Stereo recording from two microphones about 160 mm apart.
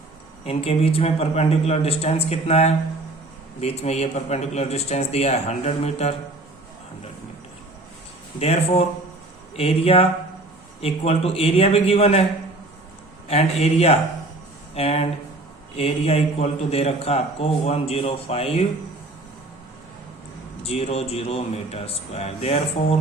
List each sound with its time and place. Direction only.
0.4 s a man's voice: 40° left (ahead or behind)
8.4 s a man's voice: 40° left (ahead or behind)
13.3 s a man's voice: 40° left (ahead or behind)
20.7 s a man's voice: 40° left (ahead or behind)